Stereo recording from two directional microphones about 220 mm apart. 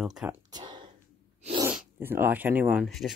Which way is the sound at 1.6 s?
10° right (ahead or behind).